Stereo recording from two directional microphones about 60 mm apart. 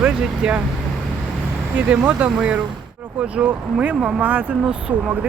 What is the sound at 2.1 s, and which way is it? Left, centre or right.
Speech, right.